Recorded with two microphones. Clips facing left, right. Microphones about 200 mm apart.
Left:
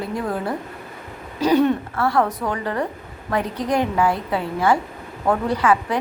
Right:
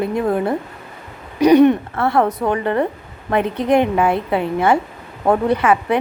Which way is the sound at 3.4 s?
60° right (ahead or behind).